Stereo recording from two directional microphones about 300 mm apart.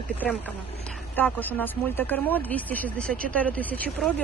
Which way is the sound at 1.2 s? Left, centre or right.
Centre.